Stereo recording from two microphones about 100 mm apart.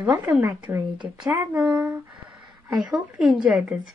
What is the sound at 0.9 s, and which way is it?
Speech, 50° right (ahead or behind).